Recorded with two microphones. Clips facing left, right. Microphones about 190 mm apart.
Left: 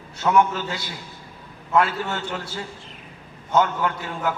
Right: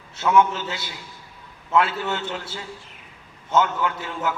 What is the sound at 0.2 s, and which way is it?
A man's voice, 40° left (ahead or behind).